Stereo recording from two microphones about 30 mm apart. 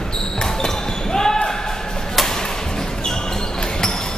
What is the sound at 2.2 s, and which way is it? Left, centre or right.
Music, centre.